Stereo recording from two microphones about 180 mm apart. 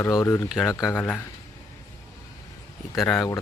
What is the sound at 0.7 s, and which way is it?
Speech, 15° left (ahead or behind).